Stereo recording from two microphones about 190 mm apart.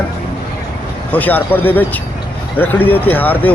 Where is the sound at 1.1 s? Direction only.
10° left (ahead or behind).